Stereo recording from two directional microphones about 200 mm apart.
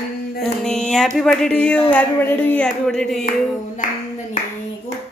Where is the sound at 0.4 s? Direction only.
5° left (ahead or behind).